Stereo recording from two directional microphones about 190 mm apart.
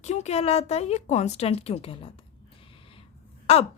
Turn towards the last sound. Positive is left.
turn(degrees=30)  # may be behind; listen again after turning